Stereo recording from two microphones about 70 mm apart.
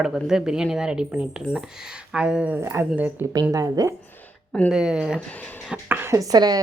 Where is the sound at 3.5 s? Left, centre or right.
Right.